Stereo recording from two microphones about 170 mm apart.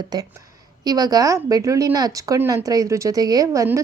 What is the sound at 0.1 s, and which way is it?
A woman's voice, 25° right (ahead or behind).